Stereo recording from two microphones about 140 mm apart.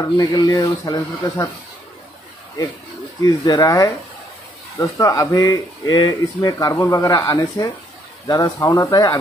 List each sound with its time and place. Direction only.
0.0 s speech: 25° left (ahead or behind)
3.3 s speech: 25° left (ahead or behind)